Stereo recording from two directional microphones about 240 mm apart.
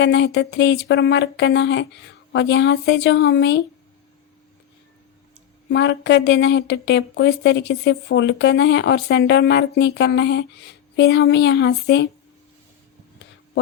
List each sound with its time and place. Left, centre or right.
0.0 s speech: left
5.6 s speech: left